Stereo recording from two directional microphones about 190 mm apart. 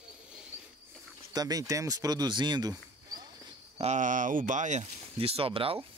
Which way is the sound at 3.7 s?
40° right (ahead or behind).